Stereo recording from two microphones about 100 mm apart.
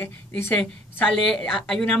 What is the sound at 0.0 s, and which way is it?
Speech, 25° left (ahead or behind).